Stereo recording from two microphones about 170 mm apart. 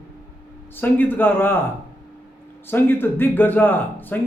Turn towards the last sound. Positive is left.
turn(degrees=10)  # may be behind; listen again after turning